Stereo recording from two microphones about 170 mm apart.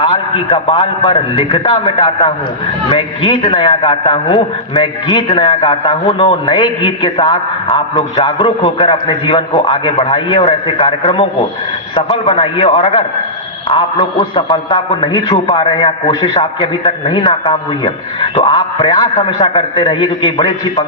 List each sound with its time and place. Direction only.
0.0 s a man's voice: 30° left (ahead or behind)
18.5 s a man's voice: 25° left (ahead or behind)